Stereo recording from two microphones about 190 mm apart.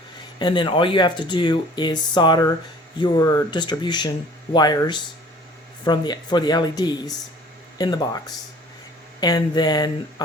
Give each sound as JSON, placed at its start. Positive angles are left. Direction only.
{"t": 0.3, "sound": "speech", "side_deg": 25}